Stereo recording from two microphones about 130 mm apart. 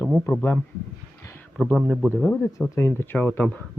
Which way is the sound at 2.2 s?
10° left (ahead or behind).